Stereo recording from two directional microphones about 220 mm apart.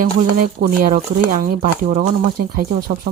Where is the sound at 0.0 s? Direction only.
40° right (ahead or behind).